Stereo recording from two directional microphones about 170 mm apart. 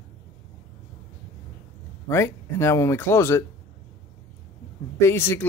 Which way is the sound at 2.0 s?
15° left (ahead or behind).